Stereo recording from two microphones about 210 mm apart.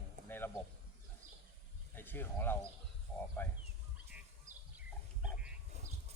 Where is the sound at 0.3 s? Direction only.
10° left (ahead or behind).